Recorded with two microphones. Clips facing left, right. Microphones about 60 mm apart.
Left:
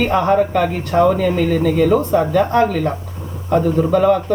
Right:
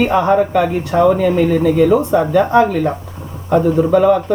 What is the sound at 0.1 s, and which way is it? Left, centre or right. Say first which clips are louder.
Speech: right 2 dB; centre.